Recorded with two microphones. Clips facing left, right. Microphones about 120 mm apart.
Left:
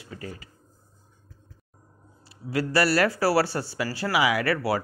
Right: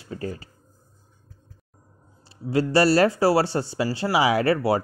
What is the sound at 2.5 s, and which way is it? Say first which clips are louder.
Speech: right 4 dB; 25° right (ahead or behind).